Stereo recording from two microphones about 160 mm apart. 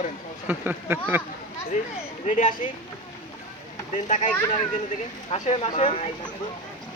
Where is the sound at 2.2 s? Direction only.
50° left (ahead or behind).